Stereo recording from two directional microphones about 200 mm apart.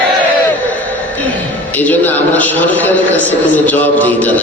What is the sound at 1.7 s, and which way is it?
A man's voice, 10° left (ahead or behind).